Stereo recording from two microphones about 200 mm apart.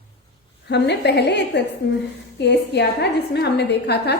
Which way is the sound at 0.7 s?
55° left (ahead or behind).